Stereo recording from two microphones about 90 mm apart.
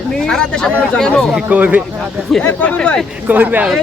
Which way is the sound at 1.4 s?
15° right (ahead or behind).